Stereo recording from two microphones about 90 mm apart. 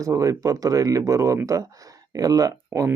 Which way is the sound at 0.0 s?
35° right (ahead or behind).